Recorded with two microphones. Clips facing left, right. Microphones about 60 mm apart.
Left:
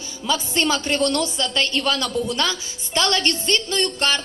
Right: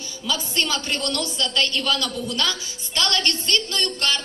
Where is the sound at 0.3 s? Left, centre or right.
Left.